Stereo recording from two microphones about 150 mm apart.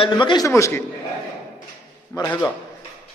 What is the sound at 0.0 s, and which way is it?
Speech, 30° left (ahead or behind).